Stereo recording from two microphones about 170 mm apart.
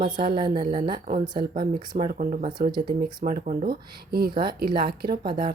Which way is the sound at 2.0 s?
50° right (ahead or behind).